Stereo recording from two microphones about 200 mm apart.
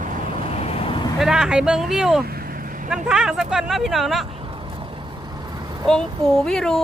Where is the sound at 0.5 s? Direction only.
30° left (ahead or behind).